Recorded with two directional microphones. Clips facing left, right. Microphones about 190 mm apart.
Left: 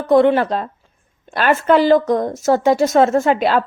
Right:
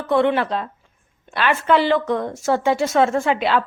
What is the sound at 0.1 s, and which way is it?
Speech, 40° left (ahead or behind).